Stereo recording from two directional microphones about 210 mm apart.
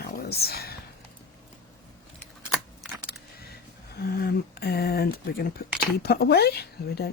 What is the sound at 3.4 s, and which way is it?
Speech, 50° left (ahead or behind).